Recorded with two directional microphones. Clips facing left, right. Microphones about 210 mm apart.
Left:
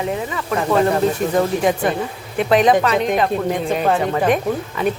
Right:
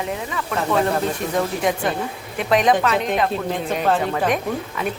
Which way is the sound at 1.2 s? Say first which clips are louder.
Left 5 dB; 40° left (ahead or behind).